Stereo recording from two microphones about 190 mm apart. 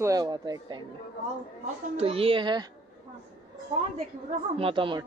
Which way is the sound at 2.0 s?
30° right (ahead or behind).